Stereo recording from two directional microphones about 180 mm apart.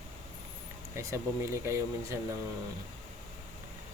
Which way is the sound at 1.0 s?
15° right (ahead or behind).